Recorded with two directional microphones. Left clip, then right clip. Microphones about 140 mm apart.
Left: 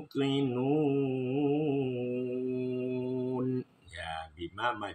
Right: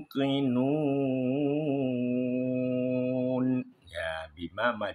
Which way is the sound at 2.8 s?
40° right (ahead or behind).